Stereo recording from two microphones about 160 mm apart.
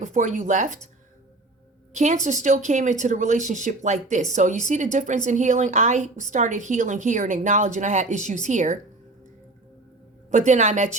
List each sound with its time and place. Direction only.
0.0 s a woman's voice: 50° right (ahead or behind)
1.9 s a woman's voice: 50° right (ahead or behind)
10.3 s a woman's voice: 50° right (ahead or behind)